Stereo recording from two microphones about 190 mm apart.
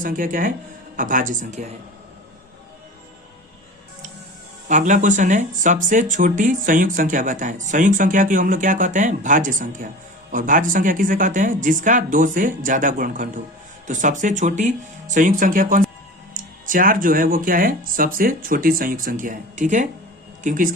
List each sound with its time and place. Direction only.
0.0 s speech: 45° right (ahead or behind)
4.7 s speech: 40° right (ahead or behind)